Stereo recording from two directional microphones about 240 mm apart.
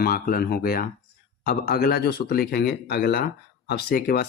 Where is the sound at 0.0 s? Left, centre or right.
Left.